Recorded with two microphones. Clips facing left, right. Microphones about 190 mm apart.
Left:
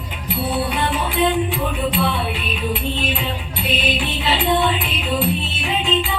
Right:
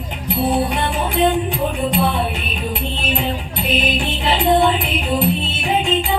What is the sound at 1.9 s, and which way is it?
Music, 45° right (ahead or behind).